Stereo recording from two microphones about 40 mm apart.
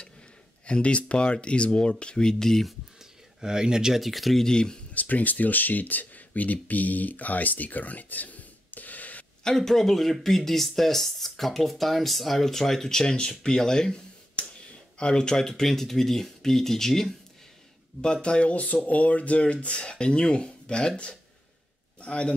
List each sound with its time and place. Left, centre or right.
0.7 s speech: left; by 2.6 s centre
3.3 s speech: centre
4.0 s speech: centre
4.5 s speech: centre
4.9 s speech: left
9.4 s speech: centre
14.4 s a sound: left
15.0 s speech: left
18.0 s speech: left